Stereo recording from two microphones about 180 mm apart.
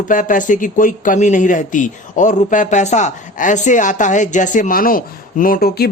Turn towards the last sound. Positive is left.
turn(degrees=55)  # may be behind; listen again after turning